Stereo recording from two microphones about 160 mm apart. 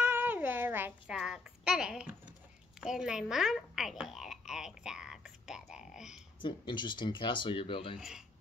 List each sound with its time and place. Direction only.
0.0 s a sound: 10° right (ahead or behind)
2.8 s a child's voice: 5° right (ahead or behind)
6.4 s speech: 30° left (ahead or behind)